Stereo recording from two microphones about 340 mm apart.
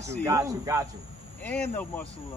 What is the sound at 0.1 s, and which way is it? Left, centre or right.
Speech, centre.